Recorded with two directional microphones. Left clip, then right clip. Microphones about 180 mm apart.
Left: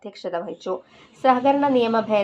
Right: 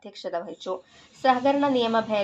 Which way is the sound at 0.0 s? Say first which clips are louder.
Left 3 dB; 25° left (ahead or behind).